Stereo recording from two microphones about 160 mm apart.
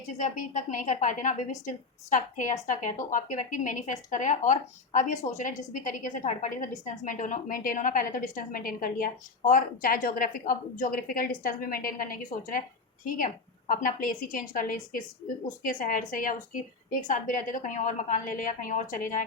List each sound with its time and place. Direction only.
0.2 s a woman's voice: 50° left (ahead or behind)